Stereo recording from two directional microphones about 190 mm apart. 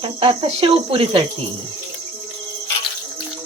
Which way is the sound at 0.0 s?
25° right (ahead or behind).